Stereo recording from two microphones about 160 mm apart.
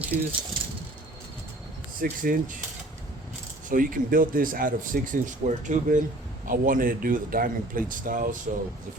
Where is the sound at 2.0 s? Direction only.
60° right (ahead or behind).